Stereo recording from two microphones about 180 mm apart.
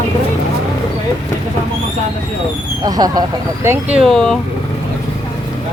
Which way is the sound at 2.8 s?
20° right (ahead or behind).